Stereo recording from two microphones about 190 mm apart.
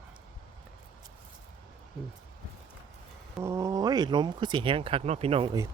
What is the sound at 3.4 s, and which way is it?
Speech, 15° right (ahead or behind).